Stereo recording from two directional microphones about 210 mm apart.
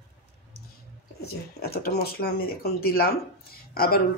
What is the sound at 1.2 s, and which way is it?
Speech, 50° left (ahead or behind).